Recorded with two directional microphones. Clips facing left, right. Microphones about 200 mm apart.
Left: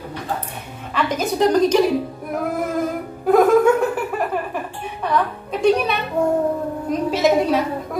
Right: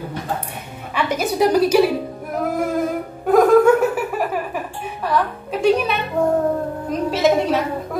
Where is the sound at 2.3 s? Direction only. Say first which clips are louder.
Right 1 dB; centre (ahead or behind).